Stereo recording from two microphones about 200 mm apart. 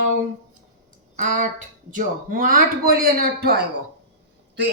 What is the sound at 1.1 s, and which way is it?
A man's voice, 40° right (ahead or behind).